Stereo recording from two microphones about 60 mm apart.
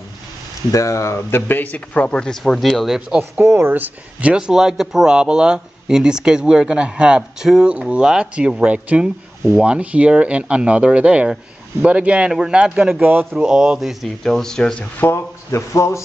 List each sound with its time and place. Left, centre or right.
0.7 s speech: left
1.5 s speech: left
2.0 s speech: centre
3.4 s speech: right
4.2 s speech: centre
13.0 s speech: right
13.4 s speech: centre
14.0 s speech: centre
15.0 s a man's voice: left
15.7 s speech: left